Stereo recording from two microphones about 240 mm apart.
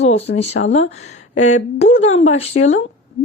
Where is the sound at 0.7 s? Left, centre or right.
Left.